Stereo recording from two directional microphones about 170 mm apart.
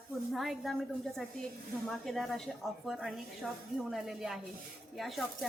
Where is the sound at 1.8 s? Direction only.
Centre (ahead or behind).